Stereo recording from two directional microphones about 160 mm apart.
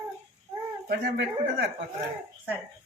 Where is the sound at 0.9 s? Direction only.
75° right (ahead or behind).